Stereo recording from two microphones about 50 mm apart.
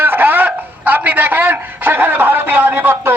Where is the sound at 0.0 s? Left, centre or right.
Right.